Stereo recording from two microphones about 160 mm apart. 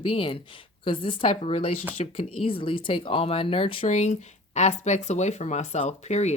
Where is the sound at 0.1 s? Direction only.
35° left (ahead or behind).